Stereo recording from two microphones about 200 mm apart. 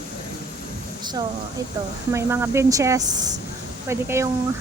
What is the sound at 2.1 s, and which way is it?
Speech, 15° right (ahead or behind).